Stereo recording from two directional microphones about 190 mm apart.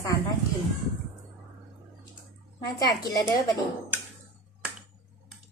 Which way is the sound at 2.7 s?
20° left (ahead or behind).